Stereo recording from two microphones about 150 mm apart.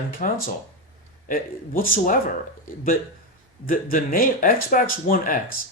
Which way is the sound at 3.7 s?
70° left (ahead or behind).